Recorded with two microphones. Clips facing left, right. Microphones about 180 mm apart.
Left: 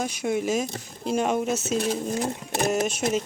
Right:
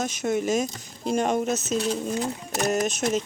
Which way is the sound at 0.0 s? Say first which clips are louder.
Right 1 dB; 5° left (ahead or behind).